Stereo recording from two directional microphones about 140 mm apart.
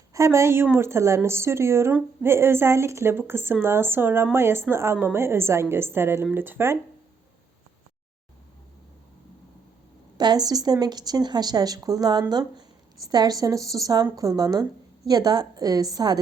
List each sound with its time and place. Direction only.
0.1 s speech: 20° right (ahead or behind)
10.2 s a woman's voice: 30° right (ahead or behind)